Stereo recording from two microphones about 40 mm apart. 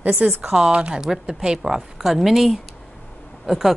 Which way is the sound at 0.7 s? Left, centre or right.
Right.